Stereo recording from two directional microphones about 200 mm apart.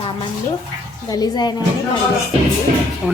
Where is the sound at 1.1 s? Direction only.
20° left (ahead or behind).